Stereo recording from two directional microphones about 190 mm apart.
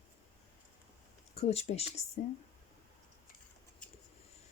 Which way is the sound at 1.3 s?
35° left (ahead or behind).